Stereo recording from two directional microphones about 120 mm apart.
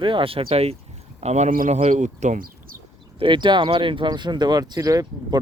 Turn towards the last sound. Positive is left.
turn(degrees=-30)  # may be behind; listen again after turning